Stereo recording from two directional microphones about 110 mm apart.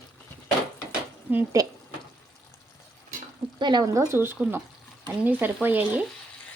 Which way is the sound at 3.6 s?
40° right (ahead or behind).